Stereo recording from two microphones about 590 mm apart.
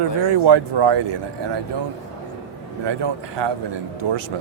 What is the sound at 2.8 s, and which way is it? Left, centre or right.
A man's voice, right.